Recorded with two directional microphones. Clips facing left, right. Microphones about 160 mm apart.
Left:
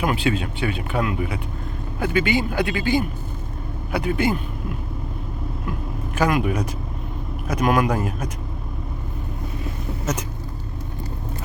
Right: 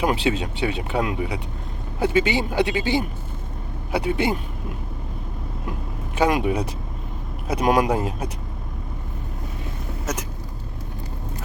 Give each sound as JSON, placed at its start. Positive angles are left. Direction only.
{"t": 0.0, "sound": "speech", "side_deg": -25}
{"t": 6.1, "sound": "speech", "side_deg": -25}